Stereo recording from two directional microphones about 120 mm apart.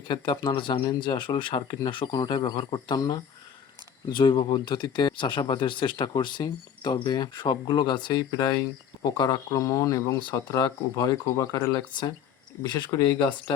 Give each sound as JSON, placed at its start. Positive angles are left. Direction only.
{"t": 0.1, "sound": "speech", "side_deg": 40}